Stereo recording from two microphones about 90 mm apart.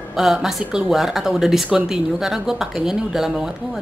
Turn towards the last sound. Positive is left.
turn(degrees=-5)  # may be behind; listen again after turning